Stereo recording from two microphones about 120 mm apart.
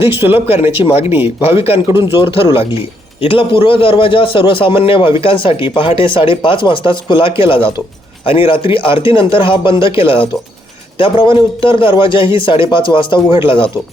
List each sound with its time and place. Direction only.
0.1 s speech: 15° right (ahead or behind)
0.4 s a man's voice: 55° left (ahead or behind)